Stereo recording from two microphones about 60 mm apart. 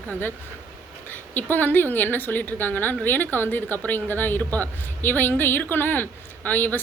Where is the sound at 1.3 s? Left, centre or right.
Left.